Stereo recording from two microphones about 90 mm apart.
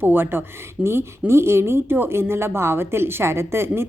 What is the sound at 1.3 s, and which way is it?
A woman's voice, 30° right (ahead or behind).